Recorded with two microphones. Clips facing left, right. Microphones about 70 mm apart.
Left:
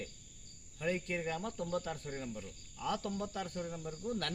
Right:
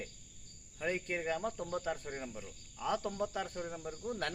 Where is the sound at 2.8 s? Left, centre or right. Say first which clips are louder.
Right 2 dB; right.